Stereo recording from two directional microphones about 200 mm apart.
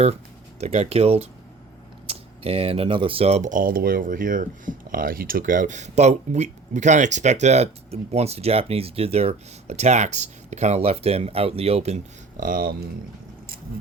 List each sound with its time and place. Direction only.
0.6 s speech: 30° right (ahead or behind)